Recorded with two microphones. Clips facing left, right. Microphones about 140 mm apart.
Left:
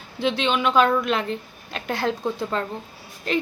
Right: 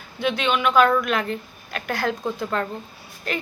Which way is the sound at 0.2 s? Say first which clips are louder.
Even; 30° left (ahead or behind).